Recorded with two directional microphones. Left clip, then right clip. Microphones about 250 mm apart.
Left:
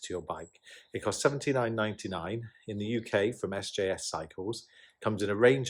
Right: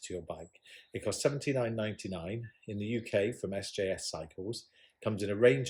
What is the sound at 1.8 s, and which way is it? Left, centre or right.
Speech, left.